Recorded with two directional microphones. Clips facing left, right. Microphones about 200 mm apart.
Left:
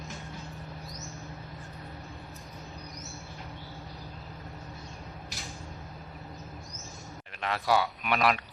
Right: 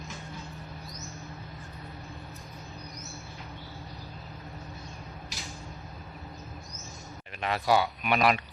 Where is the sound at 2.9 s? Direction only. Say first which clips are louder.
Even; centre (ahead or behind).